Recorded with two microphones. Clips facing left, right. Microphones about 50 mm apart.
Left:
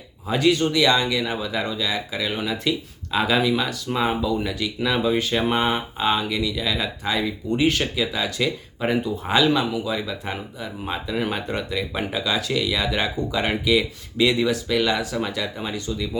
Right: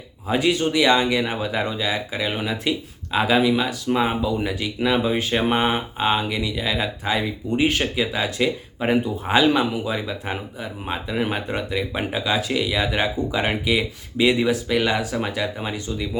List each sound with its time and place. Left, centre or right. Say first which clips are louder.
0.3 s speech: left 1 dB; centre